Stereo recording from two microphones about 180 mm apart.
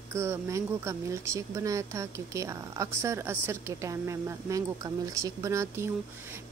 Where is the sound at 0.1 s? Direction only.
15° right (ahead or behind).